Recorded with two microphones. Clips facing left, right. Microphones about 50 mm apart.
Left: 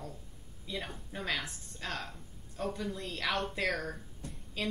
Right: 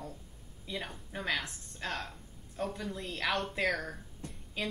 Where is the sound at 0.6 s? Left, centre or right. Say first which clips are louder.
Even; centre.